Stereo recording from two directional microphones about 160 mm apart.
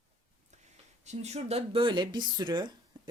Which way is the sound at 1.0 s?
45° right (ahead or behind).